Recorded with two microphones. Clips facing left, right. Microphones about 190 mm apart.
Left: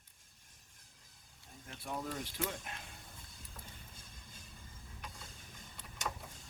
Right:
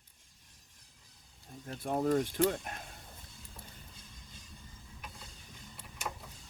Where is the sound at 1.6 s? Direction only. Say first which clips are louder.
Right 11 dB; 45° right (ahead or behind).